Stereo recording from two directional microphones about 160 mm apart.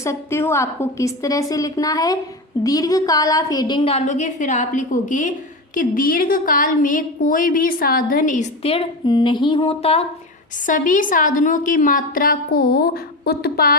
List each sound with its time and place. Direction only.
0.0 s a woman's voice: 15° left (ahead or behind); by 8.4 s 55° left (ahead or behind)
8.6 s a woman's voice: 35° left (ahead or behind)
10.7 s a woman's voice: 55° left (ahead or behind); by 13.7 s 75° left (ahead or behind)